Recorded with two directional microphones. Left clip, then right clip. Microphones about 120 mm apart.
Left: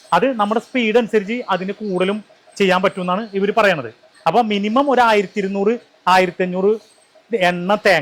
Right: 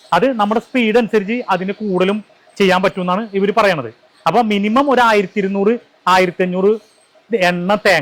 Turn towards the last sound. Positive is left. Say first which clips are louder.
# right 1 dB
turn(degrees=-40)  # may be behind; listen again after turning